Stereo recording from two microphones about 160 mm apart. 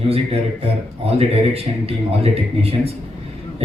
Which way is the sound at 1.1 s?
40° right (ahead or behind).